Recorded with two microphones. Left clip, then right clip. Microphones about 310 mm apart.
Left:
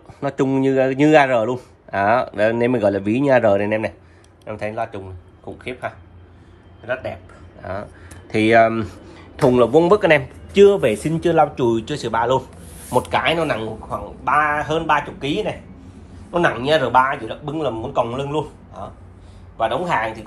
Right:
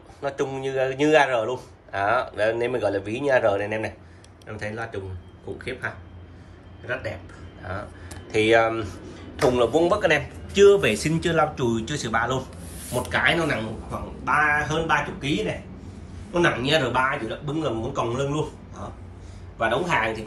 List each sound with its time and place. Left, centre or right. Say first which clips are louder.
0.2 s a man's voice: left 7 dB; left
8.3 s speech: left 5 dB; left; by 12.1 s centre
12.2 s a sound: left 8 dB; centre
12.9 s speech: left 4 dB; centre
19.6 s speech: left 3 dB; centre